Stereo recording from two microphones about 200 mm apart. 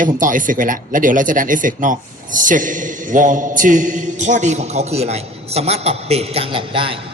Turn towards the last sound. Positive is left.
turn(degrees=-25)  # may be behind; listen again after turning